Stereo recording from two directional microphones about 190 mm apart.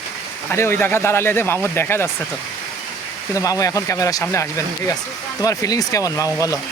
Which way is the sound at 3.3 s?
15° left (ahead or behind).